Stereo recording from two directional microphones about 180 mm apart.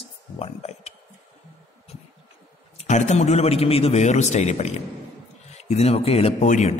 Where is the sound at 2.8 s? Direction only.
40° left (ahead or behind).